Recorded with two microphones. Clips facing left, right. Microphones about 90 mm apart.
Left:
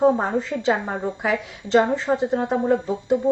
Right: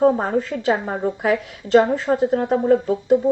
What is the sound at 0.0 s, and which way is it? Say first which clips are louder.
A woman's voice: right 2 dB; 5° left (ahead or behind).